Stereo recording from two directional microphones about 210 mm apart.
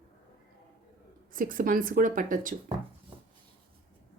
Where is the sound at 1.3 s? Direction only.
40° right (ahead or behind).